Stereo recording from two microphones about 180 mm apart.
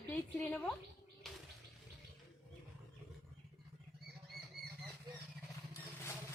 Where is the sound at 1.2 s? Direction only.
Centre (ahead or behind).